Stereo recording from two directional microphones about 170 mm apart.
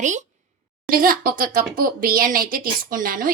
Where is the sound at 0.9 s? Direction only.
55° right (ahead or behind).